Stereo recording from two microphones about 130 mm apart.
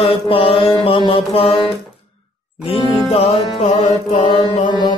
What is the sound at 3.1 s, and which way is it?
Music, 50° left (ahead or behind).